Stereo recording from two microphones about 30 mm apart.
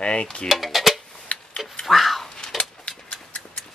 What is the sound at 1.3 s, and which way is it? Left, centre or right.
Tick-tock, left.